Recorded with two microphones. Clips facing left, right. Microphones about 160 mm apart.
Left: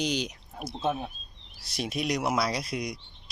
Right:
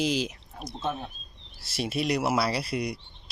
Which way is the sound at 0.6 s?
10° left (ahead or behind).